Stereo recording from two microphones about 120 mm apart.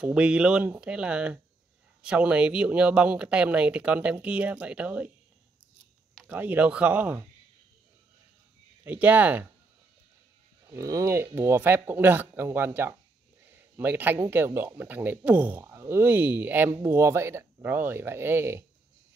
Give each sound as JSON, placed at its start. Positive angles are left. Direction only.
{"t": 0.0, "sound": "speech", "side_deg": -10}
{"t": 6.2, "sound": "speech", "side_deg": -15}
{"t": 8.8, "sound": "speech", "side_deg": -15}
{"t": 10.7, "sound": "speech", "side_deg": -25}